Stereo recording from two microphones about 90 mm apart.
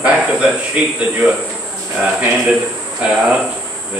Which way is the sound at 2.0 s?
10° right (ahead or behind).